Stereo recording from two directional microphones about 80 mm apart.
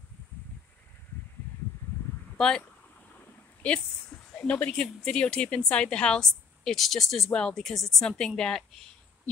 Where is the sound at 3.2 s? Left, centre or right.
Centre.